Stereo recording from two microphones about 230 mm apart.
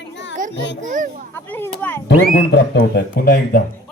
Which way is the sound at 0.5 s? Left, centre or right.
Left.